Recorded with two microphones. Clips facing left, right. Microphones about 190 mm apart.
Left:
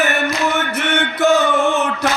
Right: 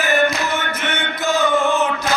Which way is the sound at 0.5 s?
70° left (ahead or behind).